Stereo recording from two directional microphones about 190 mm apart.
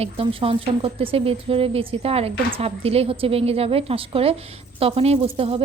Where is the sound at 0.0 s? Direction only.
30° right (ahead or behind).